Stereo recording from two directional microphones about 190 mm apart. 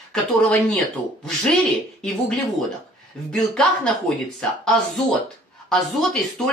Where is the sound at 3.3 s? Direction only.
5° left (ahead or behind).